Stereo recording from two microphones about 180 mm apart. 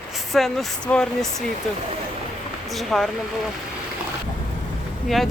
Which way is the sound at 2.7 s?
Centre (ahead or behind).